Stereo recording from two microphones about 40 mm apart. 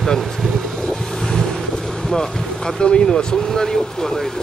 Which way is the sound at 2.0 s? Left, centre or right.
Centre.